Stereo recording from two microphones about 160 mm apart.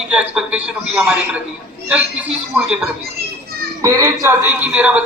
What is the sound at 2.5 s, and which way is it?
Speech, 5° right (ahead or behind).